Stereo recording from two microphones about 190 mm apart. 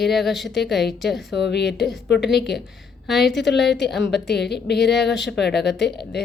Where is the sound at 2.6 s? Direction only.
Centre (ahead or behind).